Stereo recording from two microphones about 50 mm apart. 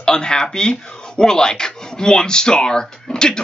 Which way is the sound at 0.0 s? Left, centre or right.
Centre.